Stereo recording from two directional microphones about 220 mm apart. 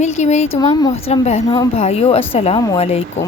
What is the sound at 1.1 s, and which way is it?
A woman's voice, 30° left (ahead or behind).